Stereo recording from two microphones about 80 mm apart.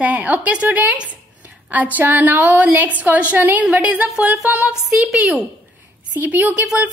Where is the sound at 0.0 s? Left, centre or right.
Centre.